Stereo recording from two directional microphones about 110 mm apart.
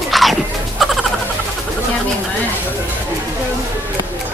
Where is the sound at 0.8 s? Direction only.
Centre (ahead or behind).